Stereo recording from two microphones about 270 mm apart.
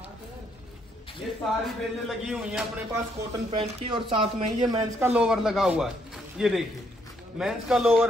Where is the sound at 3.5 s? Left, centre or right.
Centre.